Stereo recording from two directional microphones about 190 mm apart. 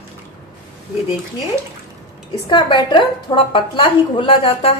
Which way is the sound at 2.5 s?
25° left (ahead or behind).